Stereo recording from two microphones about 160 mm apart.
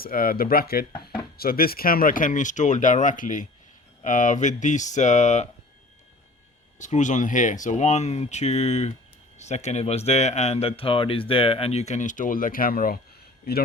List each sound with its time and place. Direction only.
0.0 s speech: 65° left (ahead or behind); by 5.5 s 45° left (ahead or behind)
6.7 s speech: 50° left (ahead or behind)